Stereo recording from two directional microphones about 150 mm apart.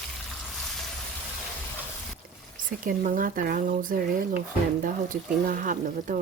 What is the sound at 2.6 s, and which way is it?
Speech, 65° right (ahead or behind).